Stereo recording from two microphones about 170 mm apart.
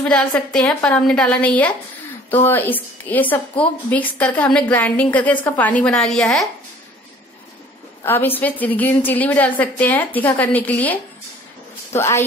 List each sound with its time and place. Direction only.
0.0 s a woman's voice: 5° left (ahead or behind)
8.0 s a woman's voice: 10° left (ahead or behind)